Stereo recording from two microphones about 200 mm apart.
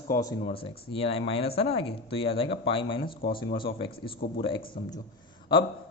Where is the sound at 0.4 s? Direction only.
25° left (ahead or behind).